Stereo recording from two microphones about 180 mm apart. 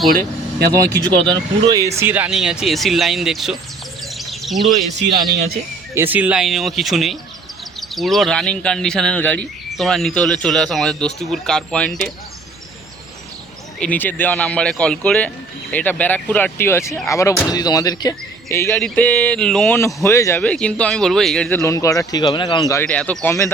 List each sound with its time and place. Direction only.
0.1 s speech: 55° right (ahead or behind)
0.7 s speech: 20° right (ahead or behind); by 3.6 s centre (ahead or behind)
4.0 s bird: centre (ahead or behind)
5.9 s speech: 10° right (ahead or behind)
13.7 s speech: 10° left (ahead or behind)
21.6 s speech: 15° left (ahead or behind)
22.7 s speech: 10° left (ahead or behind)